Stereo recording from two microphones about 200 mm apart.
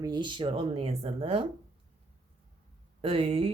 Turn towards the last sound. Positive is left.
turn(degrees=-30)  # may be behind; listen again after turning